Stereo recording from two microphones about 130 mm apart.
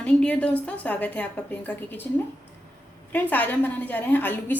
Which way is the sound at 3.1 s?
15° left (ahead or behind).